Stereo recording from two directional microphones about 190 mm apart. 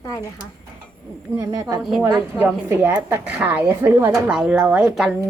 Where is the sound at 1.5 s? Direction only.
20° right (ahead or behind).